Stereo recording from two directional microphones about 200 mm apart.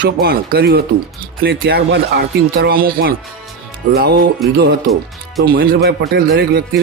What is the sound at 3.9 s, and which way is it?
Speech, 50° right (ahead or behind).